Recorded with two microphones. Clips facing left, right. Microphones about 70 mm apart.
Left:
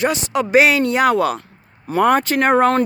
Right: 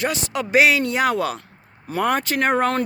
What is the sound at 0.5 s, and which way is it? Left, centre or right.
Speech, left.